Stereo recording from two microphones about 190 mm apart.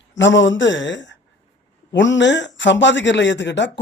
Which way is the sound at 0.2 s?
75° left (ahead or behind).